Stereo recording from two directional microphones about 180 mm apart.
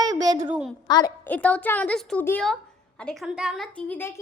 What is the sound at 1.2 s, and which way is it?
A woman's voice, 10° left (ahead or behind).